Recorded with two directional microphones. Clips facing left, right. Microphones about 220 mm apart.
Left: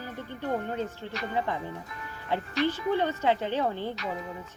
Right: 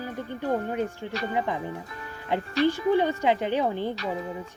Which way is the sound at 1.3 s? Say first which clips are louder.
Right 1 dB; 15° right (ahead or behind).